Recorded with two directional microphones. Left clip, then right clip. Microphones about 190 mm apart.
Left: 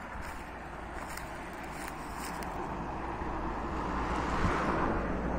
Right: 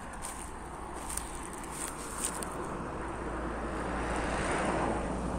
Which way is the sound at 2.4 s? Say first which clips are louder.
Even; 50° left (ahead or behind).